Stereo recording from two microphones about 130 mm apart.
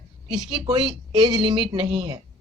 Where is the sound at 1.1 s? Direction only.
30° right (ahead or behind).